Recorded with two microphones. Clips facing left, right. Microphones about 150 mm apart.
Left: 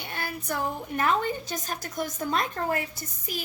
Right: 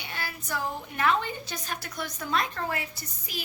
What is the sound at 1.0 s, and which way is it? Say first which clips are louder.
A woman's voice: left 1 dB; 40° left (ahead or behind).